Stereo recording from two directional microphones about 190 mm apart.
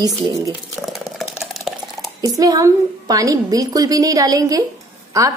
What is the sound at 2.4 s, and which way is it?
A woman's voice, 20° right (ahead or behind).